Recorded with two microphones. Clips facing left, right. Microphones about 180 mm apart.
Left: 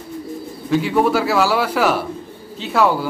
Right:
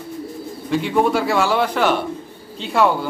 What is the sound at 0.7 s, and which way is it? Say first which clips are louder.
A man's voice: left 1 dB; centre (ahead or behind).